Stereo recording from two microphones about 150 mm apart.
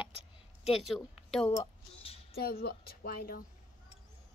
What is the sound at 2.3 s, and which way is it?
Speech, 90° left.